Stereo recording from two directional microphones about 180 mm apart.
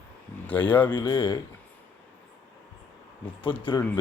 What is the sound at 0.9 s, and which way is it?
Speech, 25° left (ahead or behind).